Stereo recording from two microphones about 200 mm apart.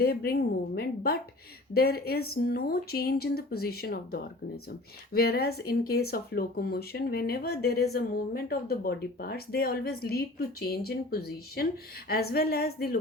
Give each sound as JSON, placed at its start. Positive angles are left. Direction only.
{"t": 0.0, "sound": "speech", "side_deg": 50}